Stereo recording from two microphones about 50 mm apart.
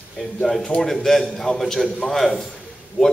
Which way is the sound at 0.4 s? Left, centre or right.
Centre.